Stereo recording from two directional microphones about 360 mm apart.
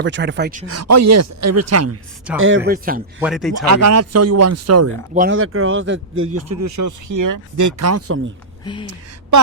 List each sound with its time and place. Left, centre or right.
0.0 s speech: right
0.7 s speech: right
2.6 s speech: right
3.2 s speech: centre
3.7 s speech: right
5.1 s speech: right
5.4 s speech: right
8.6 s a sound: centre